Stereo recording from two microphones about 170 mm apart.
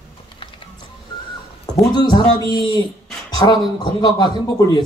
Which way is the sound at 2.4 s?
20° left (ahead or behind).